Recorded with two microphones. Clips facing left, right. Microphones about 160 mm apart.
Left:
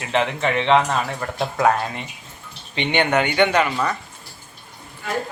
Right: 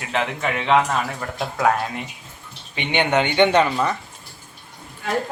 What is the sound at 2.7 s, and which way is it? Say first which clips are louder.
Speech: left 1 dB; 15° right (ahead or behind).